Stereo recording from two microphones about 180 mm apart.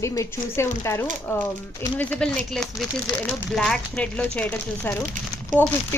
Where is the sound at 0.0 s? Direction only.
15° left (ahead or behind).